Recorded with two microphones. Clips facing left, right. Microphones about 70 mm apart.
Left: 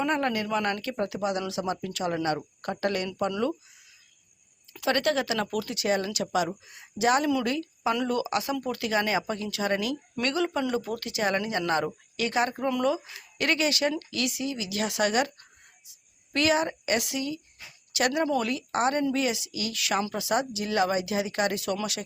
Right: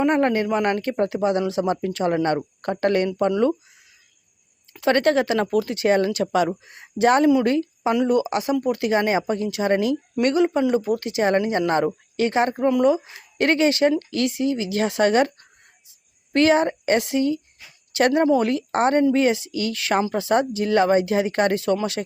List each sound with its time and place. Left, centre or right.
0.0 s speech: right
4.7 s speech: right
8.0 s speech: right
16.3 s speech: right